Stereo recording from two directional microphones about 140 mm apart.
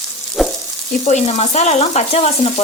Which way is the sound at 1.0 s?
55° left (ahead or behind).